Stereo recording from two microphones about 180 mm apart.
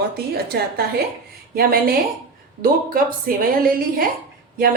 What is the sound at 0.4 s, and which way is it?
A woman's voice, 60° right (ahead or behind).